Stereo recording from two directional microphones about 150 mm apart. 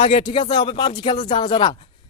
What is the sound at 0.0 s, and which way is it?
Speech, 35° left (ahead or behind).